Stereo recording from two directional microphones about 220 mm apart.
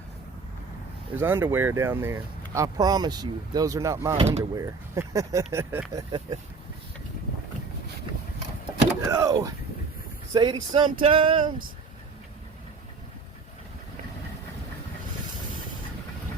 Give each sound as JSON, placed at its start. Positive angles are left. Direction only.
{"t": 1.1, "sound": "speech", "side_deg": -10}
{"t": 4.2, "sound": "male singing", "side_deg": -30}
{"t": 4.5, "sound": "speech", "side_deg": -15}
{"t": 5.9, "sound": "male singing", "side_deg": -20}
{"t": 9.0, "sound": "speech", "side_deg": -15}
{"t": 10.3, "sound": "male singing", "side_deg": -20}